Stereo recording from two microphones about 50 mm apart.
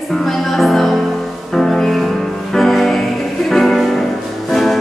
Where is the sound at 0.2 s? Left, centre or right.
Centre.